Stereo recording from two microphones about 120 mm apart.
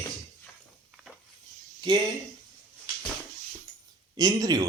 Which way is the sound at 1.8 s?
40° right (ahead or behind).